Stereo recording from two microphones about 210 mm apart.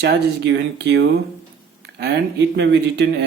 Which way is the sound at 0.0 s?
55° right (ahead or behind).